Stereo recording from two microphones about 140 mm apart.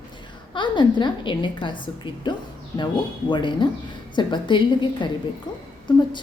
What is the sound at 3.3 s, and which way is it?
A woman's voice, 35° left (ahead or behind).